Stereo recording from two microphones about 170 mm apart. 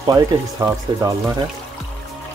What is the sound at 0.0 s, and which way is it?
Speech, 20° right (ahead or behind).